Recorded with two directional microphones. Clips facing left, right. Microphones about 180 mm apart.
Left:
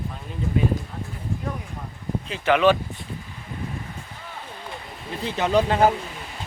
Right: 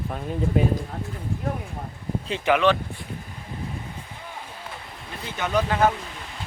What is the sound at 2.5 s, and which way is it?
Speech, 10° right (ahead or behind).